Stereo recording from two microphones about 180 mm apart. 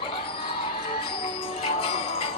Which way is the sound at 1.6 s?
30° left (ahead or behind).